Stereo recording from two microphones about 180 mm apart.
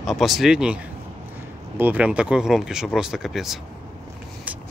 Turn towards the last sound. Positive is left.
turn(degrees=0)  # may be behind; listen again after turning